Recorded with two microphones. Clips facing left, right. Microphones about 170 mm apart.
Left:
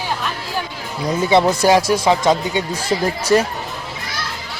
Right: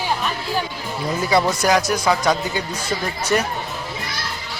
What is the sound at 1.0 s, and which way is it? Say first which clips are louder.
Speech: left 4 dB; 20° left (ahead or behind).